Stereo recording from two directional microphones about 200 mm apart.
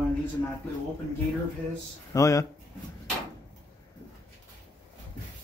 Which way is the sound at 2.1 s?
15° left (ahead or behind).